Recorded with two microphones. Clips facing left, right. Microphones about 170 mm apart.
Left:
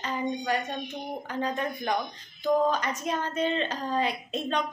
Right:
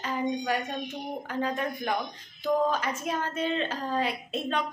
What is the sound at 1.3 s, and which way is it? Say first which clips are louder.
Speech: even; 5° right (ahead or behind).